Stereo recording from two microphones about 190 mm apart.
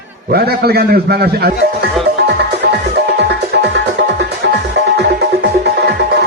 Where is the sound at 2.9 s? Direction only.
65° right (ahead or behind).